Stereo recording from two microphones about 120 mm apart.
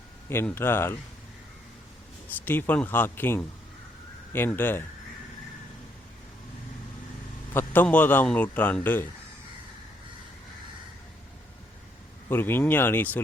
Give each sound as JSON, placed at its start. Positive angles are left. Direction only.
{"t": 0.3, "sound": "speech", "side_deg": 20}
{"t": 2.3, "sound": "a man's voice", "side_deg": 15}
{"t": 7.5, "sound": "a man's voice", "side_deg": 15}
{"t": 12.3, "sound": "a man's voice", "side_deg": 15}